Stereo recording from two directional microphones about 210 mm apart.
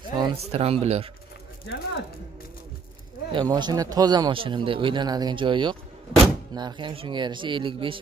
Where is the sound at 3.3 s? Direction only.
20° right (ahead or behind).